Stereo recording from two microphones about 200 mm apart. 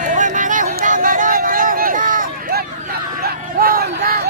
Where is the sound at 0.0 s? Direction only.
40° right (ahead or behind).